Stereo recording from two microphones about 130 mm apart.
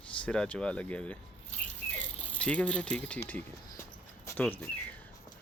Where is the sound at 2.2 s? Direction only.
10° left (ahead or behind).